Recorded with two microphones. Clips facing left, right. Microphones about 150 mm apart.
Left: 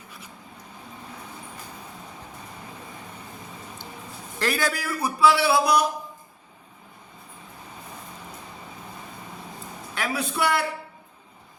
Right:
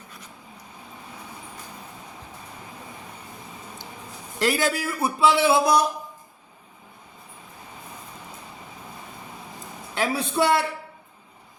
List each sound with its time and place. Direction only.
4.4 s a man's voice: 20° right (ahead or behind)
9.9 s a man's voice: 25° right (ahead or behind)